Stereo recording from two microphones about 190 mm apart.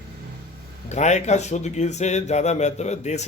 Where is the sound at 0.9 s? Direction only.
35° left (ahead or behind).